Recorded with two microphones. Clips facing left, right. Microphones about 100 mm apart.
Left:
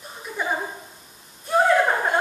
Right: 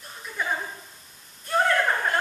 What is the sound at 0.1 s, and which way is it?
Chuckle, 15° left (ahead or behind).